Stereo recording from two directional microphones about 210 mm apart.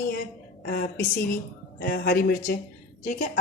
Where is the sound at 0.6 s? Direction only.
45° left (ahead or behind).